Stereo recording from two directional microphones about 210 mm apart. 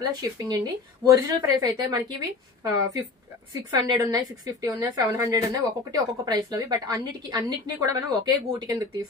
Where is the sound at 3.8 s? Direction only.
20° right (ahead or behind).